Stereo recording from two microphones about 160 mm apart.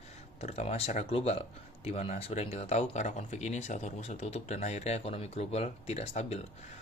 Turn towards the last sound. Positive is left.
turn(degrees=40)  # may be behind; listen again after turning